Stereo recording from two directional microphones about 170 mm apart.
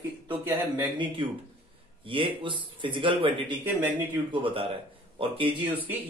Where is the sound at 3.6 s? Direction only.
10° right (ahead or behind).